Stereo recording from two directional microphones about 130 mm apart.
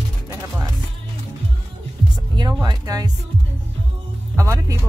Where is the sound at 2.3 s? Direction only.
35° right (ahead or behind).